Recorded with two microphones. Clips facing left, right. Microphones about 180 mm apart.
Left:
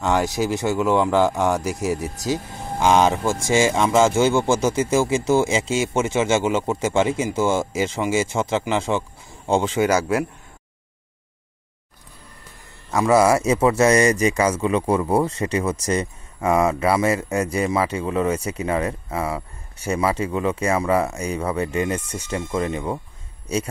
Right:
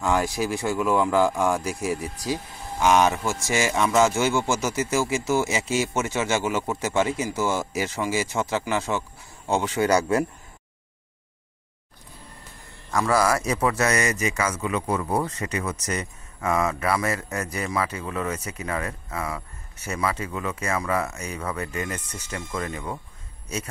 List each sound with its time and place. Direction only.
0.4 s speech: 20° left (ahead or behind)
9.8 s speech: 5° left (ahead or behind)
12.9 s speech: 25° left (ahead or behind)